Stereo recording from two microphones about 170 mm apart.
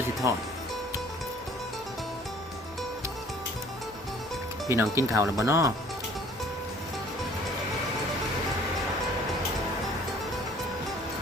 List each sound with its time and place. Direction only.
0.2 s speech: 15° right (ahead or behind)
4.7 s speech: 15° right (ahead or behind)